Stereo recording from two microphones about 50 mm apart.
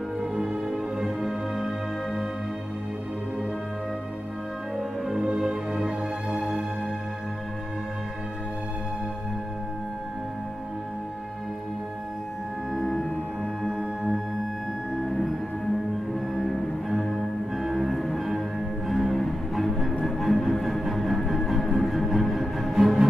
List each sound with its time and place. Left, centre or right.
0.2 s music: centre
5.2 s music: centre
12.7 s music: centre
13.7 s music: centre
16.3 s music: centre